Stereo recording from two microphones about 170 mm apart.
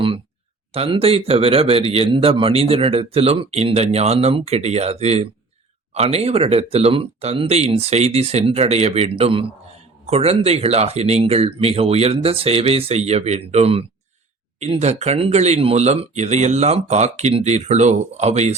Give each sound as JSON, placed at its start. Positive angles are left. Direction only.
{"t": 0.7, "sound": "speech", "side_deg": -35}